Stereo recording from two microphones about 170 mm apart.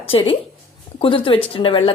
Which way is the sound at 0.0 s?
35° left (ahead or behind).